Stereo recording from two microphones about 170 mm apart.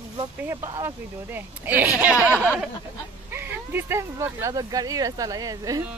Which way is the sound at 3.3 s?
10° right (ahead or behind).